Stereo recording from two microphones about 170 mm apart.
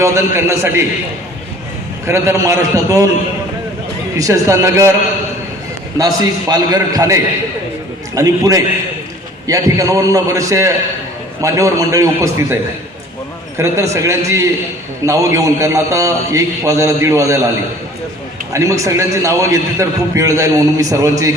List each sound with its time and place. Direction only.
0.0 s a man's voice: 15° right (ahead or behind)
2.0 s a man's voice: 15° right (ahead or behind)
4.2 s a man's voice: 20° right (ahead or behind)
6.5 s a man's voice: 20° right (ahead or behind)
13.6 s a man's voice: 15° right (ahead or behind)
18.5 s a man's voice: 20° right (ahead or behind)